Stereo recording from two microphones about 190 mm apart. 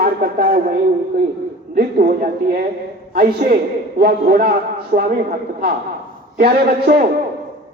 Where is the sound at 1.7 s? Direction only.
45° right (ahead or behind).